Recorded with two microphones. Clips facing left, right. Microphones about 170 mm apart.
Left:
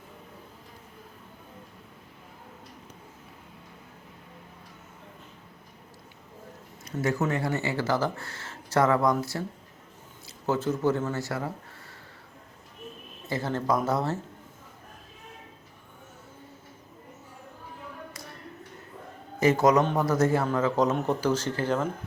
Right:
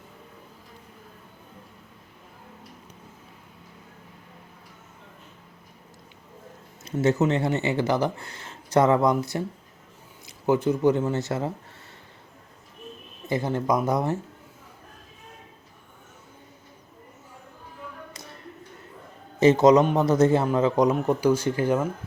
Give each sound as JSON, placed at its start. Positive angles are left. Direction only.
{"t": 6.8, "sound": "a man's voice", "side_deg": -25}
{"t": 13.2, "sound": "a man's voice", "side_deg": -15}
{"t": 19.4, "sound": "a man's voice", "side_deg": -20}